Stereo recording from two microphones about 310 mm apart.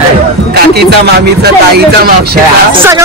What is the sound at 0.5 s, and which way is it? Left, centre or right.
Speech, right.